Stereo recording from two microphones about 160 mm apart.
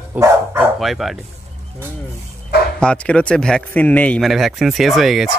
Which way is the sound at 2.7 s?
5° left (ahead or behind).